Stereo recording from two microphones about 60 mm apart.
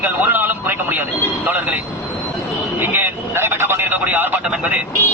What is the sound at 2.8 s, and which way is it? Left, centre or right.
Vehicle, right.